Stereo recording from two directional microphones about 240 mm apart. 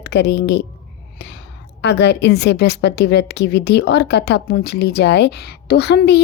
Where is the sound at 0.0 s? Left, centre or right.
Left.